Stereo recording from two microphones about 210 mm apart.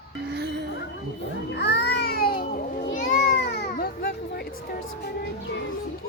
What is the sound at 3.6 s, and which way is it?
Music, 50° left (ahead or behind).